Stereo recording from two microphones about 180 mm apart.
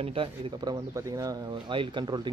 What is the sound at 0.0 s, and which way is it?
Speech, 30° right (ahead or behind).